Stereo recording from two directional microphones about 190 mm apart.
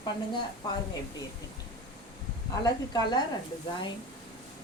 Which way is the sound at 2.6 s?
20° left (ahead or behind).